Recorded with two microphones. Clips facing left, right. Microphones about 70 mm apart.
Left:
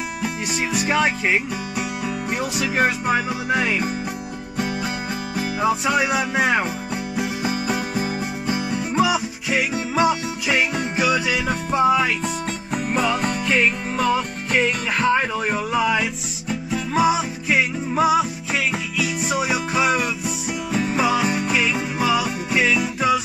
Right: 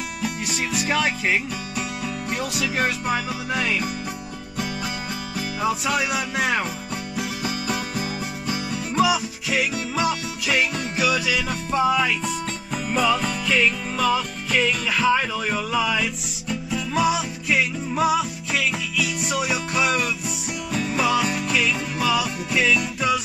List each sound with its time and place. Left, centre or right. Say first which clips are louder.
0.2 s music: left 1 dB; centre
5.3 s music: left 4 dB; centre
16.7 s music: left 3 dB; left